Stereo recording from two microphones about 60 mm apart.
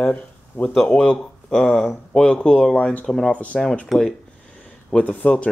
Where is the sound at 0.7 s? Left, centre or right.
Centre.